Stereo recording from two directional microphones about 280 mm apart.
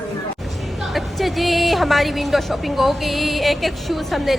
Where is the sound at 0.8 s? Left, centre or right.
Centre.